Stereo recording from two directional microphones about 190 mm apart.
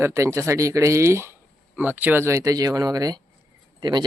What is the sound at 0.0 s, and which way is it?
Speech, 15° right (ahead or behind).